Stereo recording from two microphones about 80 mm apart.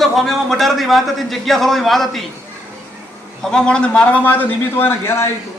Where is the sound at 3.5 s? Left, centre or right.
Centre; by 5.3 s left.